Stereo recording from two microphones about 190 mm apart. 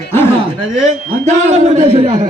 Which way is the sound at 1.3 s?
40° right (ahead or behind).